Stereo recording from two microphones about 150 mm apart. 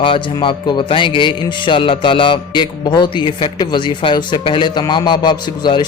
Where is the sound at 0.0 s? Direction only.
35° left (ahead or behind).